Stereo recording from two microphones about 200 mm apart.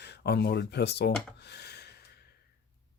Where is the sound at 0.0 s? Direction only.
55° left (ahead or behind).